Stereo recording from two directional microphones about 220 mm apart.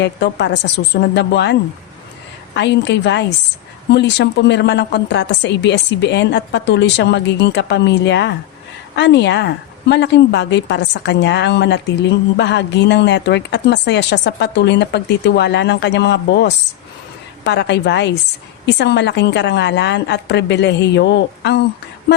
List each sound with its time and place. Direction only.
0.0 s a woman's voice: 50° left (ahead or behind)
2.6 s a woman's voice: 50° left (ahead or behind)